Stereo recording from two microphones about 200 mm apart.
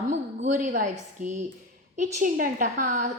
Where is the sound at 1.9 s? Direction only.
40° right (ahead or behind).